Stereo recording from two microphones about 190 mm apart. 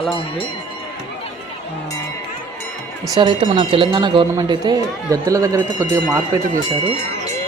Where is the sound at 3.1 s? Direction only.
25° right (ahead or behind).